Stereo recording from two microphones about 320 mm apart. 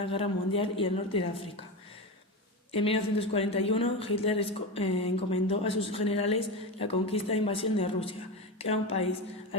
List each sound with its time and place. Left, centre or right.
0.0 s speech: centre
2.7 s a woman's voice: centre